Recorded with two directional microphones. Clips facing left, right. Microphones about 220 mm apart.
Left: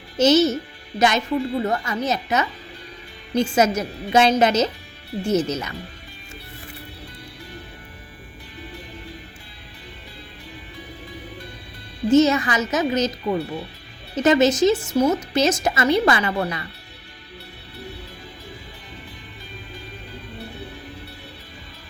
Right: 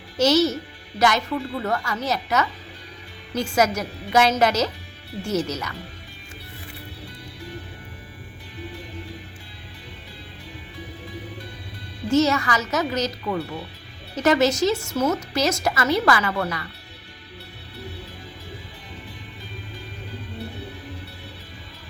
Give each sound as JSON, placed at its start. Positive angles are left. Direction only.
{"t": 0.2, "sound": "speech", "side_deg": 20}
{"t": 12.0, "sound": "speech", "side_deg": 20}